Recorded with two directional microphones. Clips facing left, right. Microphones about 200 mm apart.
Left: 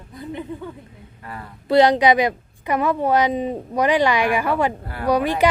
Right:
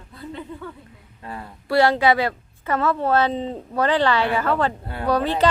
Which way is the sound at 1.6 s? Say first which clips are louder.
Left 3 dB; 20° left (ahead or behind).